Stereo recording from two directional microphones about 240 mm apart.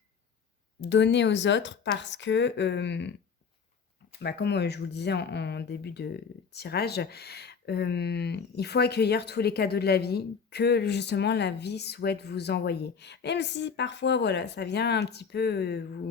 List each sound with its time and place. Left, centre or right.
0.8 s speech: left
4.2 s speech: left